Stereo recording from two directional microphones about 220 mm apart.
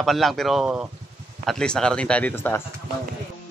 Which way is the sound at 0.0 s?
Centre (ahead or behind).